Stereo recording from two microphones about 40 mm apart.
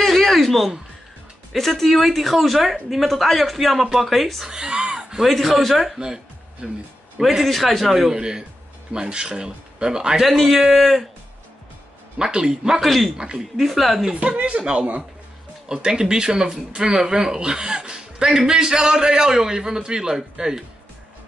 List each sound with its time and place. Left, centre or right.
0.0 s a sound: centre
1.5 s speech: centre
4.5 s a sound: right
5.2 s speech: centre
5.9 s music: centre
7.2 s speech: centre
8.1 s speech: centre
10.2 s speech: centre
12.2 s speech: right
12.8 s speech: centre
14.1 s speech: right; by 20.6 s centre